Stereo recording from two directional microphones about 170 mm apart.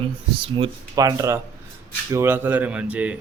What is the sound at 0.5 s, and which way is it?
A man's voice, 25° right (ahead or behind).